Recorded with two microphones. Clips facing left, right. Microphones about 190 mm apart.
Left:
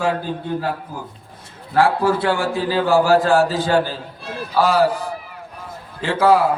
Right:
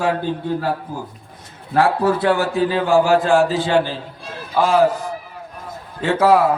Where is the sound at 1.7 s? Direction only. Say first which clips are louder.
Even; 25° right (ahead or behind).